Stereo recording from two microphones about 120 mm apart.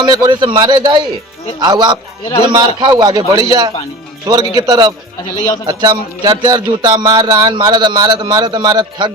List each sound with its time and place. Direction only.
0.0 s speech: 40° right (ahead or behind)